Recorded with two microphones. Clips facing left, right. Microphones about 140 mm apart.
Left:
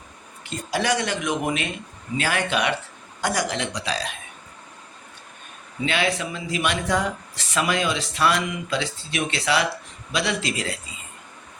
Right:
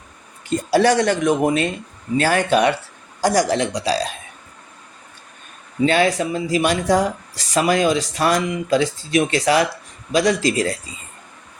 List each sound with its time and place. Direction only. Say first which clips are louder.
0.7 s speech: right 8 dB; 45° right (ahead or behind)
5.8 s speech: right 8 dB; 40° right (ahead or behind)